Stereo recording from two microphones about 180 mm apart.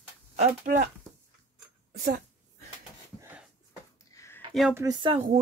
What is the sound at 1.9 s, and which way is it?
Speech, 60° right (ahead or behind).